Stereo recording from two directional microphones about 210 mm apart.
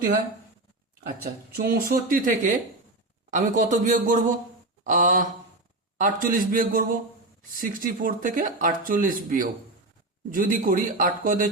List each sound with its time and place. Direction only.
1.2 s speech: 45° right (ahead or behind)